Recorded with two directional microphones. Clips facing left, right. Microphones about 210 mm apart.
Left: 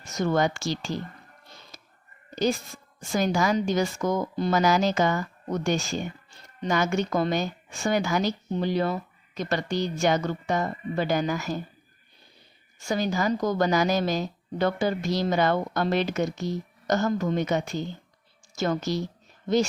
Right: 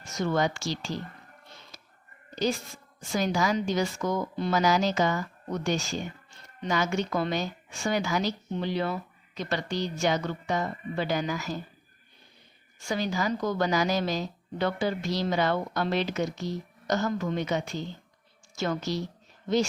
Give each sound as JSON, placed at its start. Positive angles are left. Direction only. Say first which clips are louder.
{"t": 0.0, "sound": "speech", "louder": "left 3 dB", "side_deg": 50}
{"t": 1.5, "sound": "music", "louder": "left 2 dB", "side_deg": 40}
{"t": 2.3, "sound": "speech", "louder": "left 3 dB", "side_deg": 50}
{"t": 12.9, "sound": "speech", "louder": "left 3 dB", "side_deg": 45}